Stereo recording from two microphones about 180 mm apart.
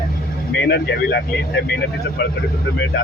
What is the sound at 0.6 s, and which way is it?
Speech, 65° left (ahead or behind).